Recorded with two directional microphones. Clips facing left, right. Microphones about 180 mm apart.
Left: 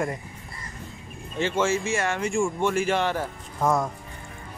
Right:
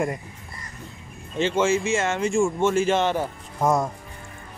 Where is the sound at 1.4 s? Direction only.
20° right (ahead or behind).